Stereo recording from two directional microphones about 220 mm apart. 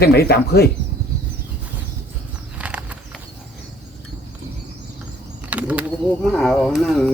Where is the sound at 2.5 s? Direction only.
5° right (ahead or behind).